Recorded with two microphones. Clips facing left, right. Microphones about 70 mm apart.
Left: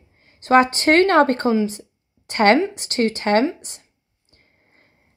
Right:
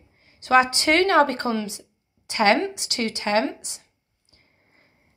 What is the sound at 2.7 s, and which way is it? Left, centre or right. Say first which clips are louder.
A woman's voice: left 7 dB; left.